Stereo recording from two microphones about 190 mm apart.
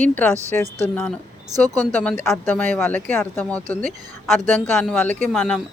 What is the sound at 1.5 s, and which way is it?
Speech, 20° right (ahead or behind).